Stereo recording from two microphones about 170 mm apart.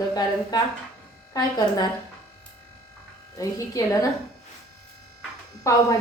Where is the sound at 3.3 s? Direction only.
20° left (ahead or behind).